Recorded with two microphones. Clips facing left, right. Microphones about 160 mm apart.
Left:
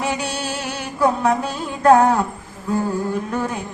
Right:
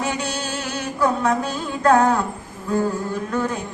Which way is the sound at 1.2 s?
30° left (ahead or behind).